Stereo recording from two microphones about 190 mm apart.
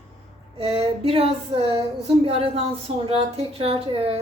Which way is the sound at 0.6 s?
30° right (ahead or behind).